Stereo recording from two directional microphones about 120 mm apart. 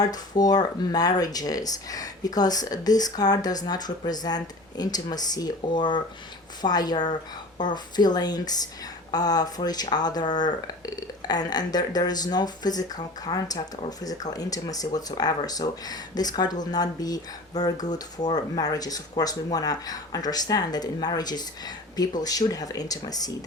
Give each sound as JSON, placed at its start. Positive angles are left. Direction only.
{"t": 0.0, "sound": "speech", "side_deg": 35}